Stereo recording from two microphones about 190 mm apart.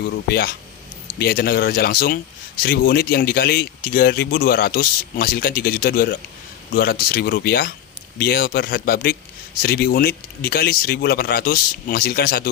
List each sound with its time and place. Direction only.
0.0 s speech: 55° left (ahead or behind)